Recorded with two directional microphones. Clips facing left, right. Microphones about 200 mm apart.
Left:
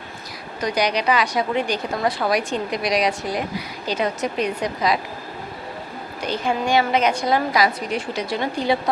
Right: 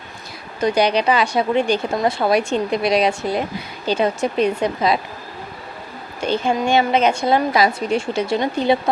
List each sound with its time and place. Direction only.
0.6 s a woman's voice: 25° right (ahead or behind)
6.1 s a woman's voice: 25° right (ahead or behind)